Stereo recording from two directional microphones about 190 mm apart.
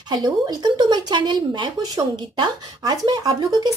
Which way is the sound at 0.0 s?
20° right (ahead or behind).